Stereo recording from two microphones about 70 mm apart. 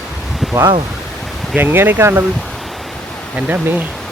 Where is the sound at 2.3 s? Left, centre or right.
Centre.